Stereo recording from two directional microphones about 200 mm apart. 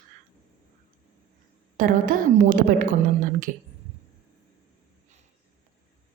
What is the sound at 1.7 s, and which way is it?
A woman's voice, 45° right (ahead or behind).